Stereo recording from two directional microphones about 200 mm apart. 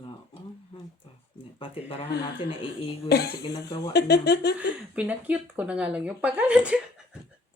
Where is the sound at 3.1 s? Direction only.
55° left (ahead or behind).